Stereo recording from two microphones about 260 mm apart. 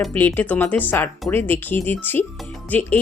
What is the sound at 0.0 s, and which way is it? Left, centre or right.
Speech, centre.